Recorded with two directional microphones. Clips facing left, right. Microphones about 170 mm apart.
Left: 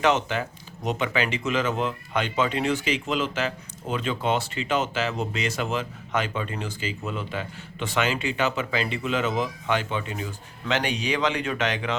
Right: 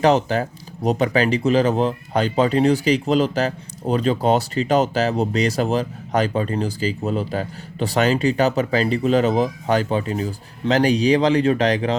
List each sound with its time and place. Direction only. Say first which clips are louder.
0.0 s speech: right 6 dB; 35° right (ahead or behind)